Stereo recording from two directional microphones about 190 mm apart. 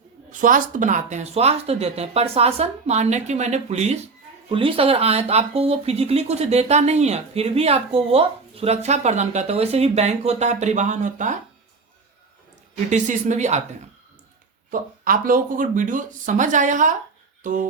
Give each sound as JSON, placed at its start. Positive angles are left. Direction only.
{"t": 0.3, "sound": "speech", "side_deg": -45}
{"t": 12.9, "sound": "speech", "side_deg": -40}
{"t": 14.7, "sound": "speech", "side_deg": -45}